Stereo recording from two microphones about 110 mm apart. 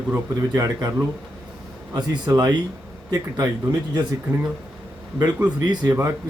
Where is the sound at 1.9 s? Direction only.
35° right (ahead or behind).